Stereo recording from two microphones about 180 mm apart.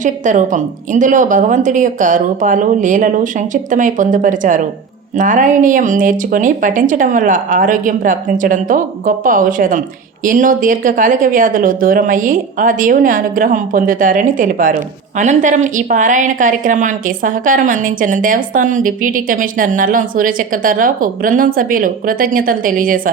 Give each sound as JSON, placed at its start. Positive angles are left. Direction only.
{"t": 0.0, "sound": "speech", "side_deg": -45}